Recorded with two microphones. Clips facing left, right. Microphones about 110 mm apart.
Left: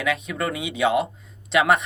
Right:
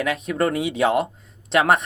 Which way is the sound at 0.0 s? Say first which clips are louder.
Right 3 dB; 40° right (ahead or behind).